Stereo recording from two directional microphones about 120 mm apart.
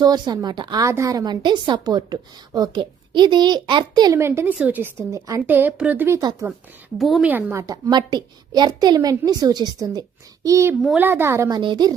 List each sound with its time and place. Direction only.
0.0 s a woman's voice: 35° right (ahead or behind)
4.2 s a woman's voice: 20° right (ahead or behind)
5.5 s a woman's voice: 15° right (ahead or behind)
7.0 s a woman's voice: centre (ahead or behind)
7.3 s a woman's voice: 15° right (ahead or behind)
7.7 s a woman's voice: 40° right (ahead or behind); by 11.4 s 20° right (ahead or behind)
11.4 s a woman's voice: 40° right (ahead or behind)